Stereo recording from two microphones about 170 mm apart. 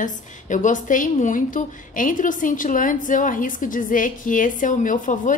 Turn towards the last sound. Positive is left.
turn(degrees=50)  # may be behind; listen again after turning